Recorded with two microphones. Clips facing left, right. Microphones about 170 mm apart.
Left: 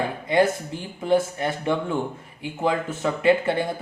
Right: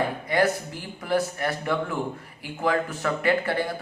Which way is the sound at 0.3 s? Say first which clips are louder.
Left 5 dB; 25° left (ahead or behind).